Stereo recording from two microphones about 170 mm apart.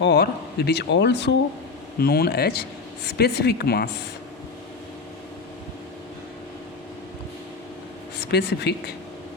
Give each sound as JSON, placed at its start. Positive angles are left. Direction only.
{"t": 0.0, "sound": "speech", "side_deg": 70}
{"t": 2.0, "sound": "speech", "side_deg": 65}
{"t": 8.2, "sound": "speech", "side_deg": 75}